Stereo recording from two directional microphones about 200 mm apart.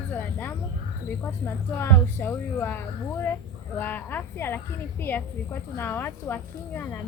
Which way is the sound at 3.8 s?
10° left (ahead or behind).